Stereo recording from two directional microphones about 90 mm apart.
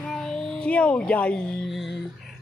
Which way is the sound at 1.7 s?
Centre (ahead or behind).